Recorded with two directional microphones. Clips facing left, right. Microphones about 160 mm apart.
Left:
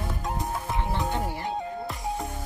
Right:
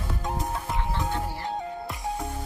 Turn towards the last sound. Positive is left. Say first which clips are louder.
# left 1 dB
turn(degrees=15)  # may be behind; listen again after turning